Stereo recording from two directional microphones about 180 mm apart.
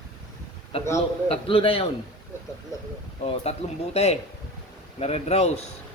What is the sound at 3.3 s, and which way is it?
Speech, 35° left (ahead or behind).